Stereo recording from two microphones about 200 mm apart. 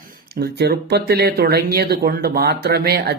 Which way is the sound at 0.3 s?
55° right (ahead or behind).